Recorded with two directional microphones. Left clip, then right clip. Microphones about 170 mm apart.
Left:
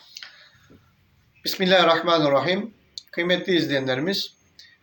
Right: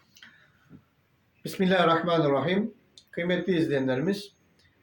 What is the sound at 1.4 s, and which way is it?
Speech, 20° right (ahead or behind).